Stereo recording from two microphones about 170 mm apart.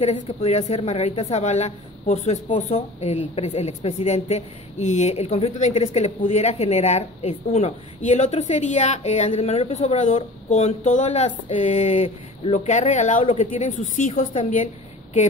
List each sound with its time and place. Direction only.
0.0 s speech: 40° left (ahead or behind)